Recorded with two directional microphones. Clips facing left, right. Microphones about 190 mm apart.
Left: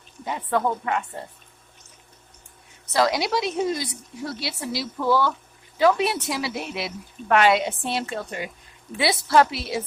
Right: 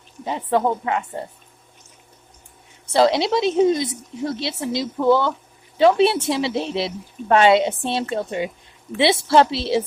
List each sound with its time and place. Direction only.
0.3 s a woman's voice: 25° right (ahead or behind)
2.8 s a woman's voice: 30° right (ahead or behind)